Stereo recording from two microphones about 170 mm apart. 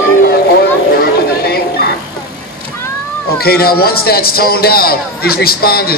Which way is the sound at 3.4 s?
65° left (ahead or behind).